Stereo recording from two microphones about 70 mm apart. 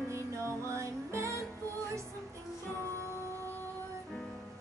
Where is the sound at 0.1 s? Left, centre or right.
Right.